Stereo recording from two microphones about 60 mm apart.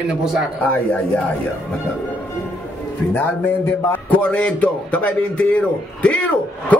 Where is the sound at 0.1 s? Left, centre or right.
Centre.